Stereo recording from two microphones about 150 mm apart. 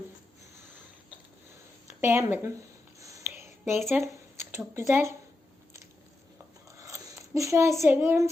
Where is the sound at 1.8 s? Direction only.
15° right (ahead or behind).